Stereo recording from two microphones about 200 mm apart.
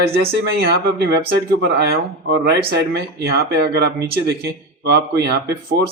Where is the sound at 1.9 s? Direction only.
55° right (ahead or behind).